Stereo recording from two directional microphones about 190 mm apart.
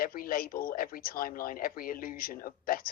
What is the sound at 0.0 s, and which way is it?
A woman's voice, 50° left (ahead or behind).